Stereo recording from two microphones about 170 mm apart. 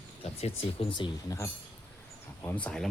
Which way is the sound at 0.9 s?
25° left (ahead or behind).